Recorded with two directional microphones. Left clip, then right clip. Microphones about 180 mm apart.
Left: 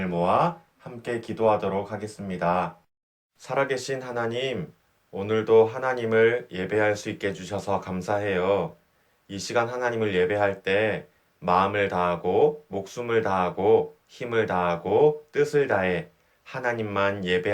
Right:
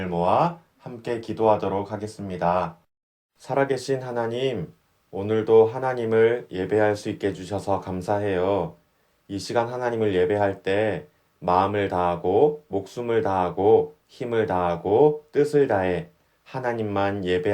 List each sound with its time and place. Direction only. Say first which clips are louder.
0.1 s speech: right 2 dB; 40° right (ahead or behind)